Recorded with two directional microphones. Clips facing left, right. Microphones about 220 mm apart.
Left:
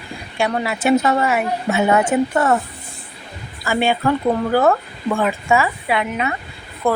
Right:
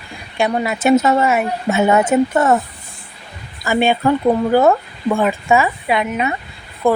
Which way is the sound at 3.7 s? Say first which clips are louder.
Right 3 dB; 20° right (ahead or behind).